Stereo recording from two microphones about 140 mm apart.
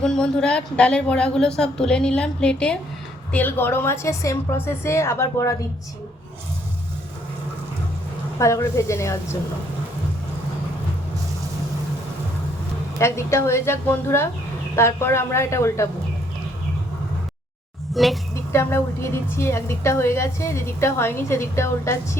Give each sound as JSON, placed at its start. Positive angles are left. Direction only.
{"t": 0.0, "sound": "a woman's voice", "side_deg": 5}
{"t": 8.4, "sound": "a woman's voice", "side_deg": 20}
{"t": 13.0, "sound": "a woman's voice", "side_deg": 20}
{"t": 17.9, "sound": "speech", "side_deg": 0}
{"t": 18.5, "sound": "a woman's voice", "side_deg": 20}